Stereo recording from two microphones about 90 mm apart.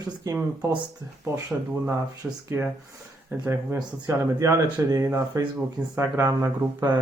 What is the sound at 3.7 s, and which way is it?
Speech, 40° right (ahead or behind).